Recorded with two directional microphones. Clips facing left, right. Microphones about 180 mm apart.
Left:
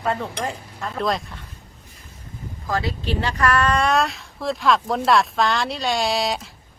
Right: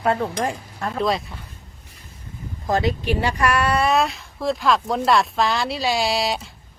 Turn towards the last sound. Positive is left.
turn(degrees=0)  # may be behind; listen again after turning